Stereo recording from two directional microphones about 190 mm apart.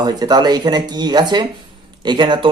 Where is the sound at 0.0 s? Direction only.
20° right (ahead or behind).